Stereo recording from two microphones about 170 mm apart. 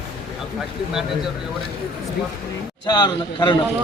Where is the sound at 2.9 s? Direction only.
25° left (ahead or behind).